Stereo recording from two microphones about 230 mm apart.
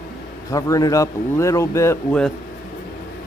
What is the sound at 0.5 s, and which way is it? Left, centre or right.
Speech, centre.